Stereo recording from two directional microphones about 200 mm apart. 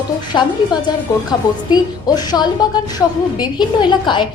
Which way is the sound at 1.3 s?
20° left (ahead or behind).